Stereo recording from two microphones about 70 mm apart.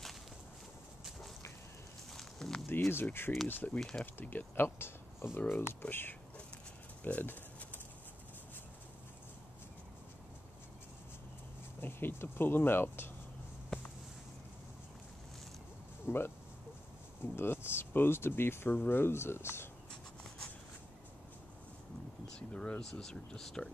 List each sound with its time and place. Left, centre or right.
2.1 s a sound: centre
2.9 s speech: left
7.0 s a sound: left
11.8 s speech: left
16.1 s speech: left
17.4 s speech: left
22.5 s speech: centre